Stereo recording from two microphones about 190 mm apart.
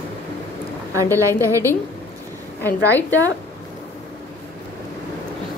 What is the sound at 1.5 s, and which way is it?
A woman's voice, 10° left (ahead or behind).